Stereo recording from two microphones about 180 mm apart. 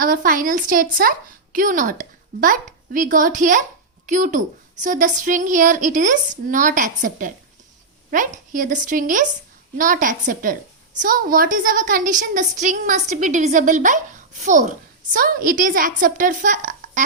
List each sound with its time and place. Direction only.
0.0 s a woman's voice: 50° right (ahead or behind)